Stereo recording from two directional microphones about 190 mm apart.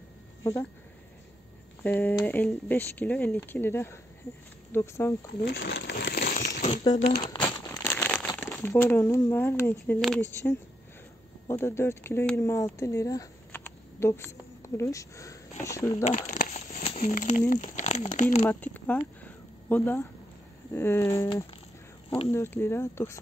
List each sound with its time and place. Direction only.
0.4 s speech: 15° left (ahead or behind)
1.8 s speech: 10° left (ahead or behind)
5.4 s speech: 60° left (ahead or behind)
6.6 s speech: 30° left (ahead or behind)
7.3 s crumpling: 25° left (ahead or behind)
7.7 s a sound: 10° left (ahead or behind)
8.3 s speech: 15° left (ahead or behind)
16.0 s crumpling: 40° left (ahead or behind)
17.5 s speech: 40° left (ahead or behind)
18.4 s speech: 10° left (ahead or behind)